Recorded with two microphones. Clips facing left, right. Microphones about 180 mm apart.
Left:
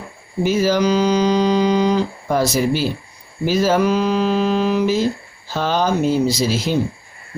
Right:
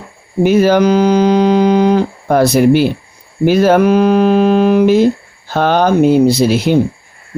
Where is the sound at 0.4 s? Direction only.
60° right (ahead or behind).